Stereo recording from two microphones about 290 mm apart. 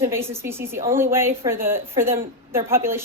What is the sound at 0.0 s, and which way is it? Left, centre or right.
Speech, centre.